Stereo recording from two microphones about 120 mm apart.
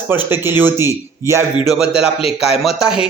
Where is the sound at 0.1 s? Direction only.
20° right (ahead or behind).